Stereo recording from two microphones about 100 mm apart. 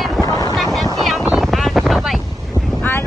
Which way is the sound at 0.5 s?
Centre (ahead or behind).